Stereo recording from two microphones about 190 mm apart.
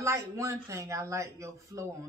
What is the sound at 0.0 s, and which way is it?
Speech, 15° right (ahead or behind).